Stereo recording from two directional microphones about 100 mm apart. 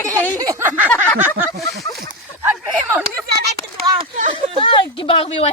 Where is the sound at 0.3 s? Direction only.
35° right (ahead or behind).